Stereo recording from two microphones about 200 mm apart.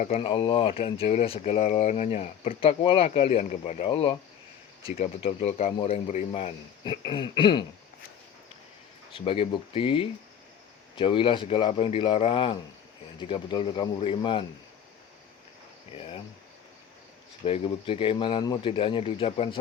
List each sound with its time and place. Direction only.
0.0 s speech: 30° left (ahead or behind)
9.1 s speech: 25° left (ahead or behind)
16.0 s speech: 30° left (ahead or behind)
17.4 s speech: 30° left (ahead or behind)